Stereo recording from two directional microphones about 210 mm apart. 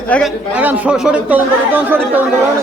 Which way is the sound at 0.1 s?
5° left (ahead or behind).